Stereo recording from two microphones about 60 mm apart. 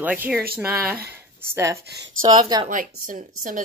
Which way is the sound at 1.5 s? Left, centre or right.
Right.